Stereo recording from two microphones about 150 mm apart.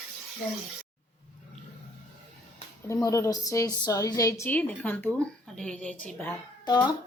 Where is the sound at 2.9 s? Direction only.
20° left (ahead or behind).